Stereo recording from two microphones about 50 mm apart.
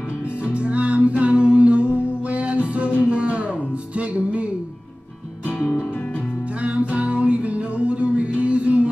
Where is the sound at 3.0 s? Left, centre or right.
Right.